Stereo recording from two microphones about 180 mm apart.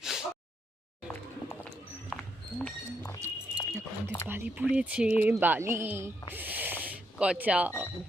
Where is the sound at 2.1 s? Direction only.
5° left (ahead or behind).